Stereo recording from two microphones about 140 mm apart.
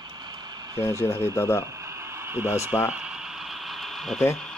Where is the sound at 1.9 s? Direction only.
20° right (ahead or behind).